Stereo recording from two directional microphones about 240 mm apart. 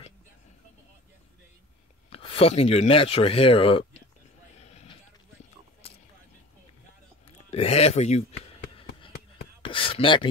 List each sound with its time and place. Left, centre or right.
2.0 s speech: left
4.6 s vehicle: left
7.2 s a sound: left